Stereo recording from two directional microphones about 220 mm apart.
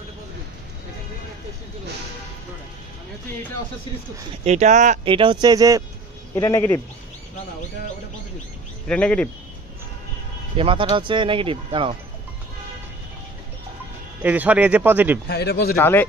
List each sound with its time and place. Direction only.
4.5 s speech: 30° right (ahead or behind); by 5.9 s 15° right (ahead or behind)
6.3 s speech: 10° left (ahead or behind)
8.8 s speech: 5° left (ahead or behind)
10.5 s speech: 25° right (ahead or behind)
14.2 s speech: 5° right (ahead or behind)
15.2 s speech: 45° left (ahead or behind)
15.8 s speech: 10° left (ahead or behind)